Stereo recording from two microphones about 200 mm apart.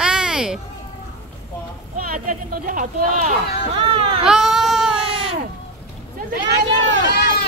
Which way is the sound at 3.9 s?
30° right (ahead or behind).